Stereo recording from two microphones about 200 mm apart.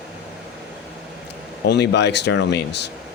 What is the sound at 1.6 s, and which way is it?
Speech, 55° left (ahead or behind).